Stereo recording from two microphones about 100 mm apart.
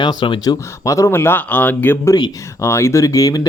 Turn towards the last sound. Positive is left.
turn(degrees=35)  # may be behind; listen again after turning